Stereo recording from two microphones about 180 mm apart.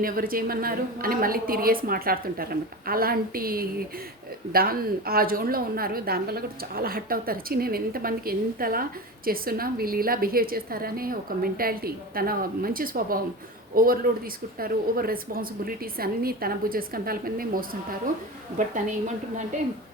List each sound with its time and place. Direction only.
0.0 s a woman's voice: 50° right (ahead or behind)